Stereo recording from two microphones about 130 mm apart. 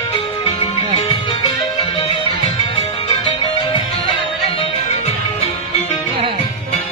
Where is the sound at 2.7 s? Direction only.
40° left (ahead or behind).